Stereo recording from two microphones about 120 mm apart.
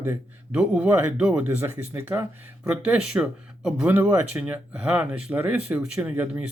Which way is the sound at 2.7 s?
10° right (ahead or behind).